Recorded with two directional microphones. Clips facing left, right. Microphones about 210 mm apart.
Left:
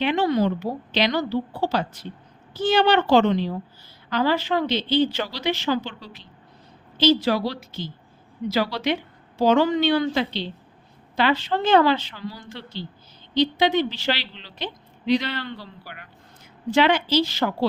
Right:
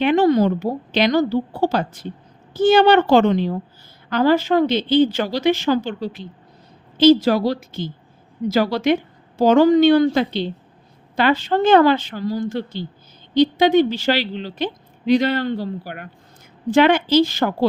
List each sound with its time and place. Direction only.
0.0 s a woman's voice: 45° right (ahead or behind)